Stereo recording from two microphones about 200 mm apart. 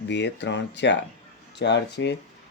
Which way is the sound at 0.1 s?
60° left (ahead or behind).